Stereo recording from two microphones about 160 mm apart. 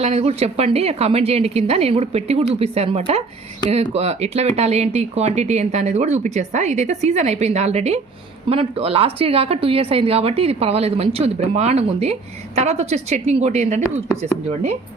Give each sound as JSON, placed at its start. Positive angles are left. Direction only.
{"t": 0.0, "sound": "a woman's voice", "side_deg": -40}